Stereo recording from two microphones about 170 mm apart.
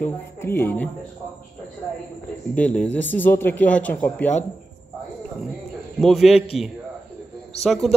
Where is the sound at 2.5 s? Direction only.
10° left (ahead or behind).